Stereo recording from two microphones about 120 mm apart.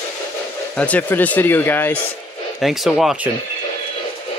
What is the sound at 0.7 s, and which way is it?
Speech, 10° left (ahead or behind).